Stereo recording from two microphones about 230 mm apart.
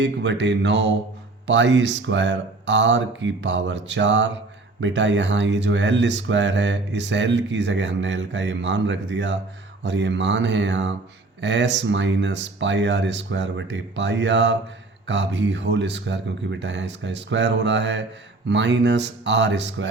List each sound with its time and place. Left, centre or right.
0.0 s speech: right